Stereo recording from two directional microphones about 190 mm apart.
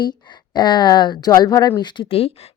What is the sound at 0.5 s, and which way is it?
A woman's voice, 20° left (ahead or behind).